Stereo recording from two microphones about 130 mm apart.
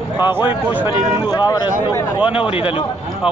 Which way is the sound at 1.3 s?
30° left (ahead or behind).